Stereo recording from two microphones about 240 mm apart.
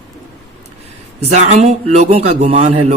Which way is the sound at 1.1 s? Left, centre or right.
Right.